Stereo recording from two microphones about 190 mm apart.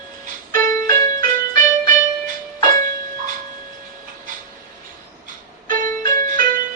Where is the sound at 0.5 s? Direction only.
45° right (ahead or behind).